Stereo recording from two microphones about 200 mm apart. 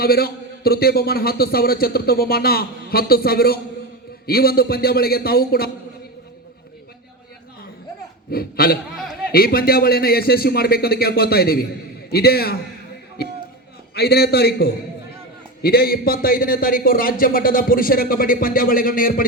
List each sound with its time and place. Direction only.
0.0 s a man's voice: 50° left (ahead or behind)
8.3 s a man's voice: 50° left (ahead or behind)
13.9 s a man's voice: 55° left (ahead or behind)